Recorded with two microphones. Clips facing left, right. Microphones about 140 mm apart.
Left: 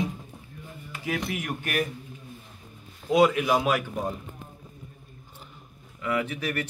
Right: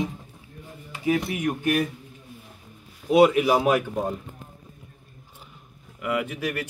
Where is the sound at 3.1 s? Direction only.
25° right (ahead or behind).